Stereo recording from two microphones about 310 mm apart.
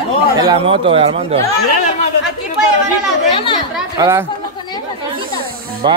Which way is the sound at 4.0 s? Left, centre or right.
Centre.